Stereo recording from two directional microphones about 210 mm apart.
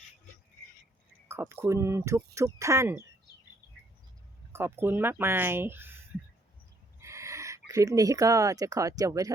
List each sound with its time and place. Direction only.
1.3 s speech: 10° right (ahead or behind)
4.5 s speech: 10° right (ahead or behind)
7.0 s a sound: 15° right (ahead or behind)
7.7 s speech: 15° right (ahead or behind)